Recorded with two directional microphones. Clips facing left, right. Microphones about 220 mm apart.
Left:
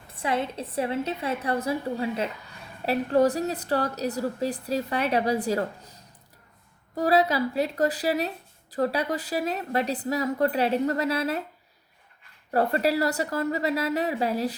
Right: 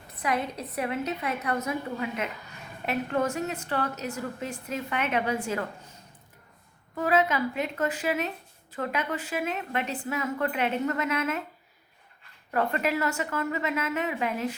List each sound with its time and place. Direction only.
0.2 s a woman's voice: 30° left (ahead or behind)
12.5 s a woman's voice: 35° left (ahead or behind)